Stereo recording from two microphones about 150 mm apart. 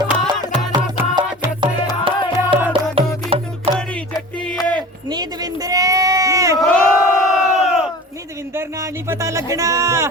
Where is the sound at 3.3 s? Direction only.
40° right (ahead or behind).